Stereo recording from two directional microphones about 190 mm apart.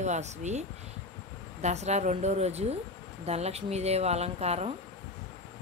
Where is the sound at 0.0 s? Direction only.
40° right (ahead or behind).